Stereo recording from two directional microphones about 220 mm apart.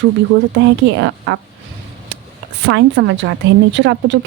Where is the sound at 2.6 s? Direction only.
55° right (ahead or behind).